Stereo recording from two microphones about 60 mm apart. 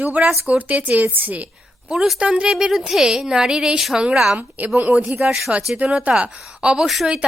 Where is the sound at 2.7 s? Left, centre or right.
Centre.